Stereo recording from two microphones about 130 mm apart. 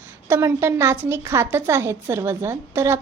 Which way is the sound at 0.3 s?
20° right (ahead or behind).